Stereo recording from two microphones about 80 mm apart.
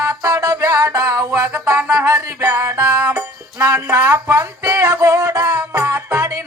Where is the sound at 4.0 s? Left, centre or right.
Right.